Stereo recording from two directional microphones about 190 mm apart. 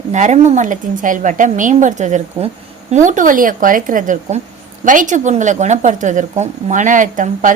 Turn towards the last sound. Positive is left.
turn(degrees=-45)  # may be behind; listen again after turning